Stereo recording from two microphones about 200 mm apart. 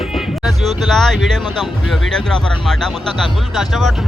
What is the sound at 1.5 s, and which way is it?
Speech, centre (ahead or behind).